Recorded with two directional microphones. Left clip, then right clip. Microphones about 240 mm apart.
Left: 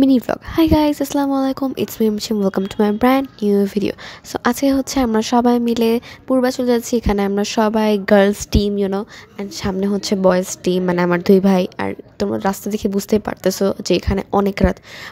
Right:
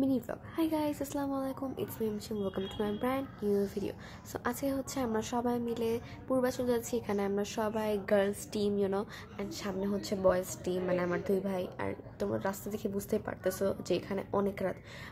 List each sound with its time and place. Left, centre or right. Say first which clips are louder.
0.0 s speech: left 18 dB; left